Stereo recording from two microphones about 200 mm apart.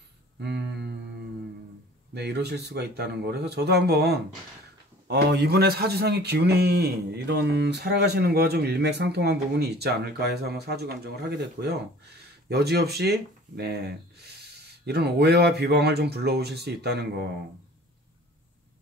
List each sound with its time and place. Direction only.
0.4 s music: 60° right (ahead or behind)
2.1 s speech: 55° right (ahead or behind)